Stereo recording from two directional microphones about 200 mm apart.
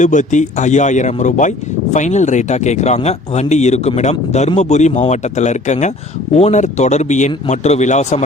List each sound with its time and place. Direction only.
0.0 s speech: 40° left (ahead or behind)